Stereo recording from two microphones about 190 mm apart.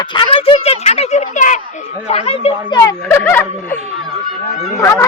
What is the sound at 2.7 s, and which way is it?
Speech, 20° left (ahead or behind).